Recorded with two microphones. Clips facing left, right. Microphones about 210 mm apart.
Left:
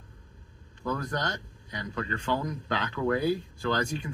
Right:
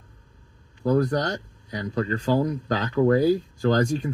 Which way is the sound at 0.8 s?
35° right (ahead or behind).